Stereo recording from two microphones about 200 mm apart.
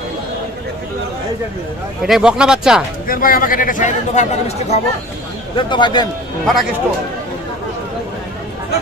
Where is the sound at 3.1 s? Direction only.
45° left (ahead or behind).